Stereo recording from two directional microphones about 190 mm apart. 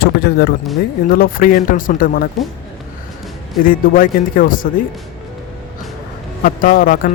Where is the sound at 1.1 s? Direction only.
50° left (ahead or behind).